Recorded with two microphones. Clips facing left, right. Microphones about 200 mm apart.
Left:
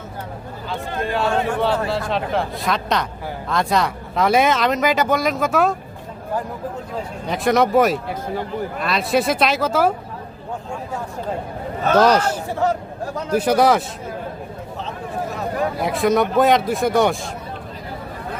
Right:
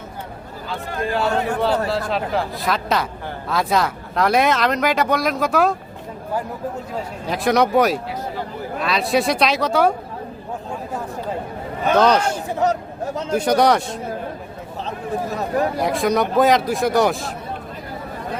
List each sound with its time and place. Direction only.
1.1 s speech: centre (ahead or behind)
7.3 s speech: centre (ahead or behind)
11.9 s speech: 10° left (ahead or behind)
12.5 s speech: 20° right (ahead or behind)
13.3 s speech: 5° left (ahead or behind)
15.8 s speech: centre (ahead or behind)